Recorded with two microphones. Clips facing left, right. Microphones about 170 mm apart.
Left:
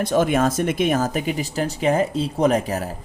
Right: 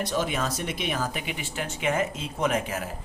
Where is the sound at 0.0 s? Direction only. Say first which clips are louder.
Left 9 dB; 50° left (ahead or behind).